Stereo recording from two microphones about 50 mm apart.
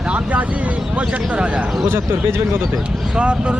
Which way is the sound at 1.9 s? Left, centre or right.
Right.